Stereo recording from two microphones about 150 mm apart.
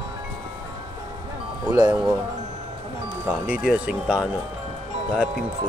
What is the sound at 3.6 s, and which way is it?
Speech, 5° right (ahead or behind).